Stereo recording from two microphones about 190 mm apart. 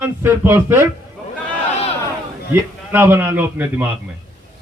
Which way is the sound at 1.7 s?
30° left (ahead or behind).